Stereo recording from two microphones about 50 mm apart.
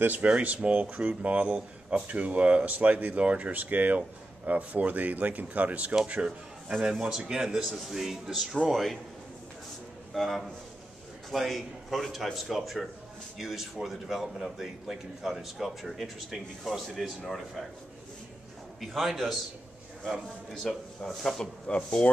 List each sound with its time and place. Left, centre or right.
0.0 s speech: right
6.8 s a man's voice: centre
10.1 s a man's voice: centre
18.8 s a man's voice: centre
20.7 s a man's voice: centre